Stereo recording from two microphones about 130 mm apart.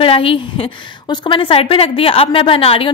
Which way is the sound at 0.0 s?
45° left (ahead or behind).